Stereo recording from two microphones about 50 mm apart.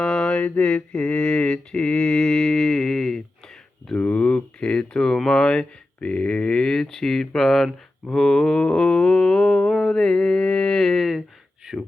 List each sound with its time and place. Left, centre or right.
0.0 s mantra: centre
0.3 s speech: left; by 3.2 s centre
3.9 s speech: left; by 7.7 s centre
8.1 s mantra: centre
10.8 s speech: centre